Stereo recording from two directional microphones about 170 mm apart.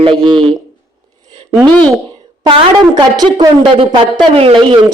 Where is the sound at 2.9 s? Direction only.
25° right (ahead or behind).